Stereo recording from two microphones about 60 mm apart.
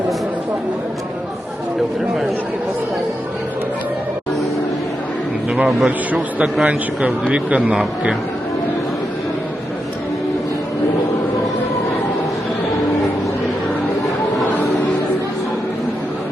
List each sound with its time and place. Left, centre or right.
5.6 s speech: centre
6.7 s speech: centre